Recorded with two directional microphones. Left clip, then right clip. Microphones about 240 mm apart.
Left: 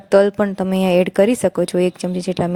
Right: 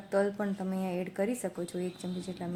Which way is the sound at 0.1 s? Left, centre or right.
Left.